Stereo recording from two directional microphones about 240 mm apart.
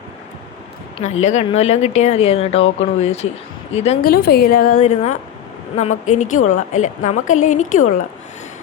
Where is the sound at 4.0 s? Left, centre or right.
Left.